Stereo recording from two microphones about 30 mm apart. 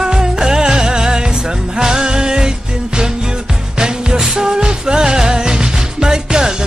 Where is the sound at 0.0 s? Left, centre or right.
Right.